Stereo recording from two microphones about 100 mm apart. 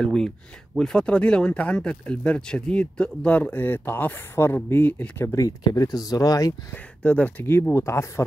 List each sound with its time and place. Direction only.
0.0 s speech: 5° left (ahead or behind); by 6.5 s 35° left (ahead or behind)
6.7 s speech: 15° left (ahead or behind)